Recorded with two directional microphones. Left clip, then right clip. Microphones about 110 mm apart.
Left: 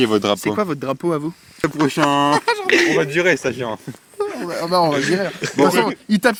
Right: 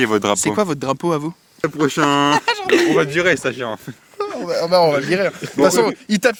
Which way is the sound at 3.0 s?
30° left (ahead or behind).